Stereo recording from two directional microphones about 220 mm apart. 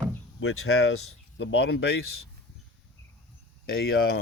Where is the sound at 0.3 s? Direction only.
65° left (ahead or behind).